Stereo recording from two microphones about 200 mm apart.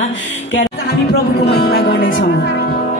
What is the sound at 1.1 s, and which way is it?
Speech, 55° left (ahead or behind).